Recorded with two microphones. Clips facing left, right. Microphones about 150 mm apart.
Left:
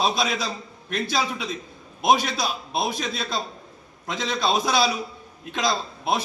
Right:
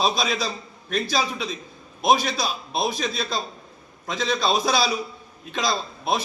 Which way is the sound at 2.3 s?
20° left (ahead or behind).